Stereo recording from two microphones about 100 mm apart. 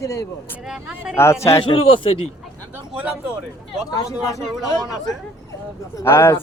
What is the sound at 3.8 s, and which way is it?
Speech, 35° left (ahead or behind).